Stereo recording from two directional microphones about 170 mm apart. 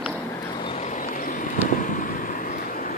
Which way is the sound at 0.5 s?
35° left (ahead or behind).